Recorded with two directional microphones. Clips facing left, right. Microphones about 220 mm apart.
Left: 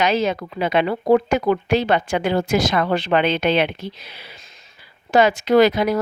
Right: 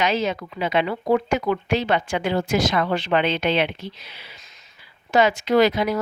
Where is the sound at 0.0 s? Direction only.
40° left (ahead or behind).